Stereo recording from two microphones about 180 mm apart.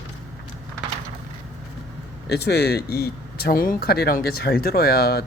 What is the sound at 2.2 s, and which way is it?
Speech, 65° left (ahead or behind).